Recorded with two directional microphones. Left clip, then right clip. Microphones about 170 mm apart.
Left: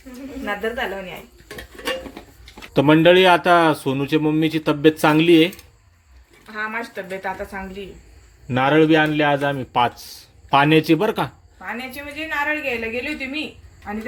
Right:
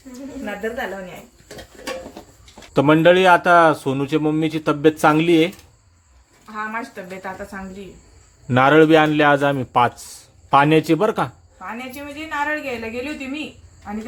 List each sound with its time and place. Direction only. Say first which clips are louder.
0.4 s a woman's voice: left 2 dB; 15° left (ahead or behind)
2.7 s a woman's voice: even; centre (ahead or behind)
8.4 s a man's voice: right 3 dB; 20° right (ahead or behind)
11.6 s a woman's voice: left 1 dB; 10° left (ahead or behind)